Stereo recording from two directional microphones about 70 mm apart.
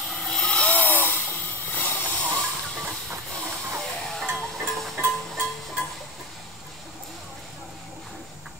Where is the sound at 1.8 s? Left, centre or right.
Right.